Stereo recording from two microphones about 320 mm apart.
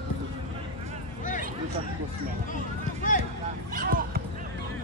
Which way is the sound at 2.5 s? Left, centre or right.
Left.